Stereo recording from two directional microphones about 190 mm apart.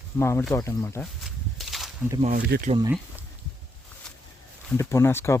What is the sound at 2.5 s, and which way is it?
Speech, 60° right (ahead or behind).